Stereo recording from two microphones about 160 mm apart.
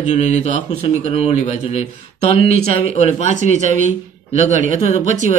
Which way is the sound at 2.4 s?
65° right (ahead or behind).